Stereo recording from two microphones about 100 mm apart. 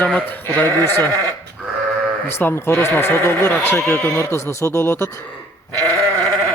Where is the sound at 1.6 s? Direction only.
10° right (ahead or behind).